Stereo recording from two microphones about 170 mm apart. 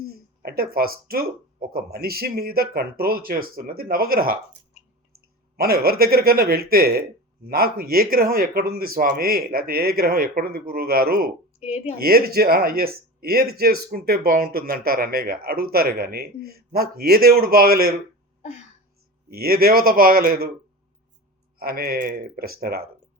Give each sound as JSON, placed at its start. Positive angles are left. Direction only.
{"t": 0.4, "sound": "speech", "side_deg": -60}
{"t": 5.5, "sound": "speech", "side_deg": -65}
{"t": 11.6, "sound": "speech", "side_deg": 40}
{"t": 11.9, "sound": "speech", "side_deg": -60}
{"t": 19.3, "sound": "speech", "side_deg": -60}
{"t": 21.6, "sound": "speech", "side_deg": -65}